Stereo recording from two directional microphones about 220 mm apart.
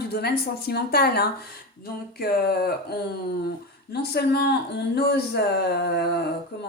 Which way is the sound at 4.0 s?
45° left (ahead or behind).